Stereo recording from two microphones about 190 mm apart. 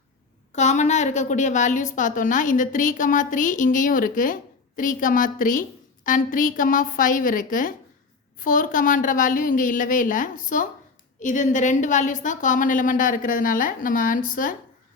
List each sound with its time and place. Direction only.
0.5 s a woman's voice: 40° left (ahead or behind)